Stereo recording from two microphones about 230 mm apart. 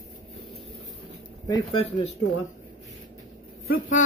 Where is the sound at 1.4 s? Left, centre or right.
Left.